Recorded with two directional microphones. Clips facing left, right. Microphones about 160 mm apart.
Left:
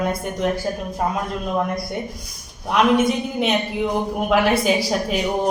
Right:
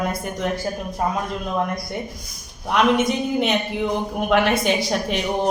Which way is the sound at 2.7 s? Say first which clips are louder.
Left 1 dB; centre (ahead or behind).